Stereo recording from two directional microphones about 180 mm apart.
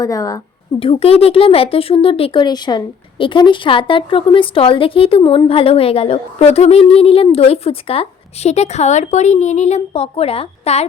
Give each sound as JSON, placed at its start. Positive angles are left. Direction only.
{"t": 0.0, "sound": "speech", "side_deg": 20}
{"t": 0.8, "sound": "speech", "side_deg": 30}